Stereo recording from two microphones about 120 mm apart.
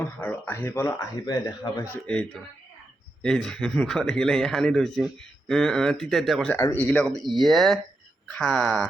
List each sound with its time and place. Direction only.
0.2 s speech: 15° left (ahead or behind)
1.2 s speech: 35° left (ahead or behind)
2.0 s speech: 5° left (ahead or behind)